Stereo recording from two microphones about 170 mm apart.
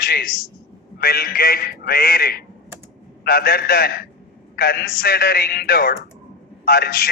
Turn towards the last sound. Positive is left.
turn(degrees=65)  # may be behind; listen again after turning